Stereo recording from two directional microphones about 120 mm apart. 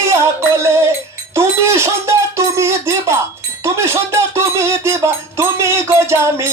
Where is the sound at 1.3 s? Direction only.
20° right (ahead or behind).